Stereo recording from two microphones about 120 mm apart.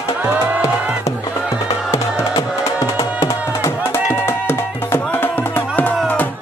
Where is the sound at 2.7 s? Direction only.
25° left (ahead or behind).